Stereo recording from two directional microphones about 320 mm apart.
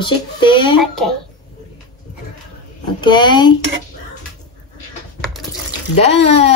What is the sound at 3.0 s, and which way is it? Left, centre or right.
Speech, centre.